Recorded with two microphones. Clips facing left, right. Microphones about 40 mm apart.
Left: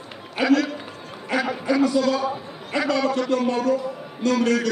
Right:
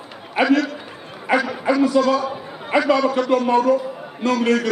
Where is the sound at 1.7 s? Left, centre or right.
Centre.